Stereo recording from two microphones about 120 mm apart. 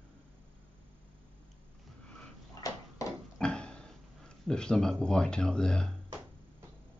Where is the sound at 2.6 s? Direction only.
30° left (ahead or behind).